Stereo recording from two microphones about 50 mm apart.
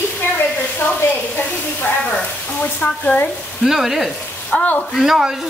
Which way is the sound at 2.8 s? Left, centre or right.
Left.